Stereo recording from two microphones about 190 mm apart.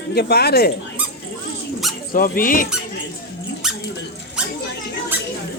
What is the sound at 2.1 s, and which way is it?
Speech, 50° left (ahead or behind).